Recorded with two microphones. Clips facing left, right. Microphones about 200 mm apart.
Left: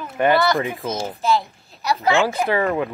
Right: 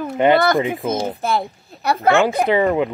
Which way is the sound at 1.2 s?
55° right (ahead or behind).